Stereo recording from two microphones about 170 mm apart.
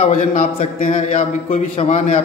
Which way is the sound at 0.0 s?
45° left (ahead or behind).